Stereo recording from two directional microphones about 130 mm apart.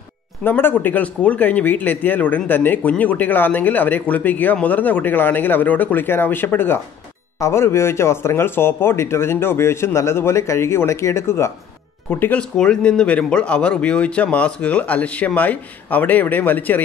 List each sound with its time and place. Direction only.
0.4 s a man's voice: 15° left (ahead or behind)